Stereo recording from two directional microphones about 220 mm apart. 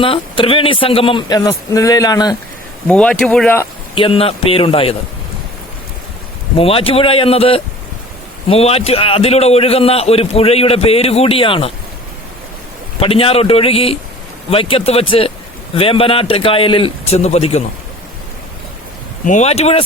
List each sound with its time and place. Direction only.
0.0 s a man's voice: 25° left (ahead or behind)
2.8 s speech: 5° left (ahead or behind)
3.9 s a man's voice: 25° left (ahead or behind)
6.6 s a man's voice: 25° left (ahead or behind)
13.0 s a man's voice: 25° left (ahead or behind)
19.2 s a man's voice: 35° left (ahead or behind)